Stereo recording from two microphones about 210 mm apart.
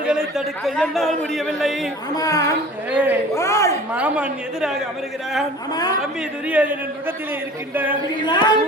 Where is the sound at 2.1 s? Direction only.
15° left (ahead or behind).